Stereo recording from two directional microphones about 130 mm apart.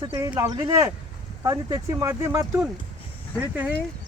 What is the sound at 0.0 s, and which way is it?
Speech, 25° right (ahead or behind).